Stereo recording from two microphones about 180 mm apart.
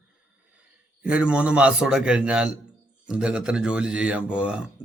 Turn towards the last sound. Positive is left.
turn(degrees=-5)  # may be behind; listen again after turning